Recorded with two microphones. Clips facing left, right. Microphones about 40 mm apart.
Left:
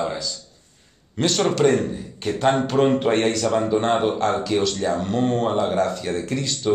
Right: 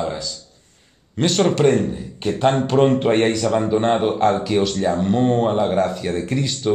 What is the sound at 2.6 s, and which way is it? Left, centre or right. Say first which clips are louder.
Speech: right 3 dB; centre.